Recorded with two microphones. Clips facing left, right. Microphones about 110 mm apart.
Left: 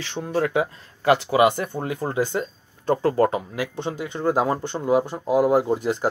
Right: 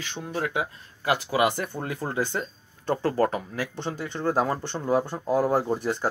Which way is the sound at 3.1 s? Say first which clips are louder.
Left 3 dB; 15° left (ahead or behind).